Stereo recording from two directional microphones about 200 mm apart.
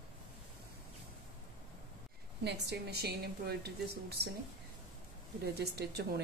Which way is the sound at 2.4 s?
55° right (ahead or behind).